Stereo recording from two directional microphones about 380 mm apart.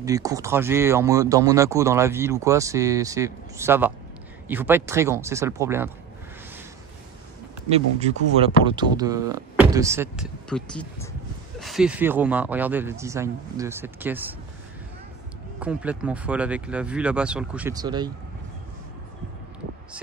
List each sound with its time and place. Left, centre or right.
0.0 s speech: centre
7.7 s speech: centre
15.6 s speech: centre